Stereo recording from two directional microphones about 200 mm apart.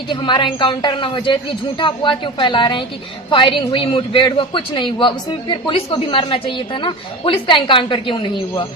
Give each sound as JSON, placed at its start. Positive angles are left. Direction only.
{"t": 0.1, "sound": "speech", "side_deg": 25}